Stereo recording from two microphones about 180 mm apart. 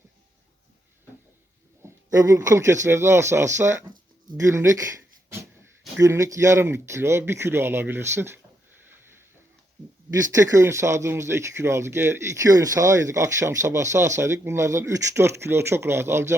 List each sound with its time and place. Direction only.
2.0 s speech: 20° right (ahead or behind)
8.9 s a sound: 10° right (ahead or behind)
10.3 s speech: 15° right (ahead or behind)